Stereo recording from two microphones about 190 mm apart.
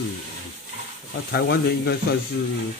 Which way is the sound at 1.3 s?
55° left (ahead or behind).